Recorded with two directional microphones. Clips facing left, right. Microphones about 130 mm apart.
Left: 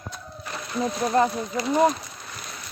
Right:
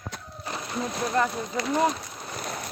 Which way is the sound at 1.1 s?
25° left (ahead or behind).